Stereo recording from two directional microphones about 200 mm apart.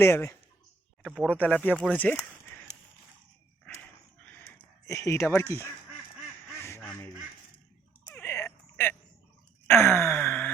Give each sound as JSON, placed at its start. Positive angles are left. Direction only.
{"t": 0.0, "sound": "speech", "side_deg": 10}
{"t": 4.9, "sound": "speech", "side_deg": 15}
{"t": 6.6, "sound": "quack", "side_deg": 15}
{"t": 8.0, "sound": "a sound", "side_deg": 5}
{"t": 9.6, "sound": "sigh", "side_deg": 10}